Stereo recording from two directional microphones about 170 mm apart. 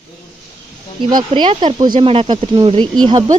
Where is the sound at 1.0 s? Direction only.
25° right (ahead or behind).